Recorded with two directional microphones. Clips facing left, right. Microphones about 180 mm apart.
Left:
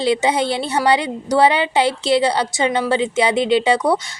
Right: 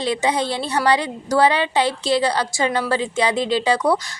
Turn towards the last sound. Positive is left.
turn(degrees=25)  # may be behind; listen again after turning